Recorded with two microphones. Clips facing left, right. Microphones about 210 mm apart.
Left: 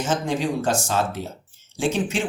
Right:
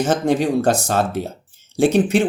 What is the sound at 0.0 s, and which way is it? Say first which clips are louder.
Speech: right 6 dB; 60° right (ahead or behind).